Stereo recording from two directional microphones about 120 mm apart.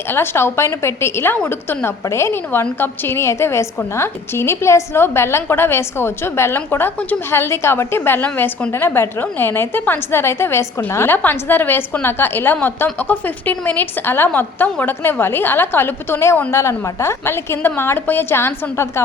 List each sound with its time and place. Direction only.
0.1 s a woman's voice: 20° left (ahead or behind)